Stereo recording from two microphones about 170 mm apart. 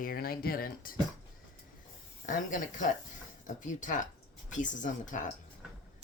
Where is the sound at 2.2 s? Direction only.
50° left (ahead or behind).